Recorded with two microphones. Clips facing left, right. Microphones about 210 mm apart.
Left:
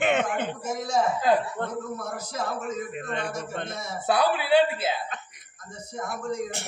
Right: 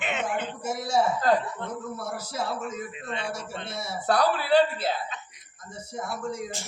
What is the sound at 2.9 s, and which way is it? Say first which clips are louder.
Speech: left 3 dB; 50° left (ahead or behind).